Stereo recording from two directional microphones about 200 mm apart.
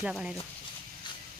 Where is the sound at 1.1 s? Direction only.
25° left (ahead or behind).